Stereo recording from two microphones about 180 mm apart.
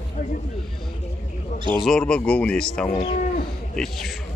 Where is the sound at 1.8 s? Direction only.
5° left (ahead or behind).